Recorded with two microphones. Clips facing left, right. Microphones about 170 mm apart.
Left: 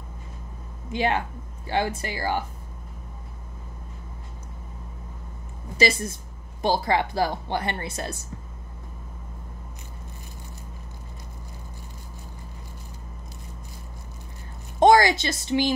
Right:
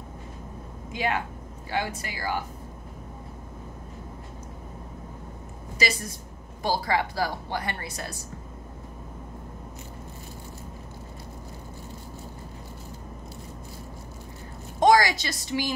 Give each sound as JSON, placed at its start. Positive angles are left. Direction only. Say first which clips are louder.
{"t": 0.9, "sound": "a woman's voice", "louder": "left 4 dB", "side_deg": 30}
{"t": 5.8, "sound": "a woman's voice", "louder": "left 6 dB", "side_deg": 25}
{"t": 14.8, "sound": "speech", "louder": "left 3 dB", "side_deg": 25}